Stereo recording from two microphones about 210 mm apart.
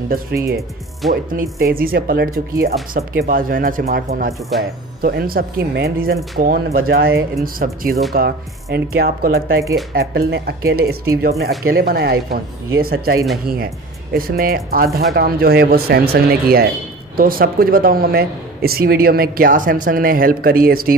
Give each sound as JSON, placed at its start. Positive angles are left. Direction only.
{"t": 0.1, "sound": "a man's voice", "side_deg": -45}